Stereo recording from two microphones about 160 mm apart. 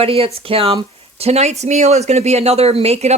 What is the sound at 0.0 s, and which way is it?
Speech, 35° right (ahead or behind).